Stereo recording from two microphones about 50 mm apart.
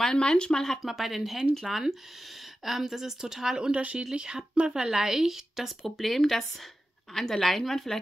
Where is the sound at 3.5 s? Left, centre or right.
Right.